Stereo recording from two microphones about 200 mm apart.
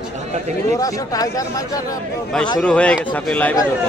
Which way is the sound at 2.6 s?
5° left (ahead or behind).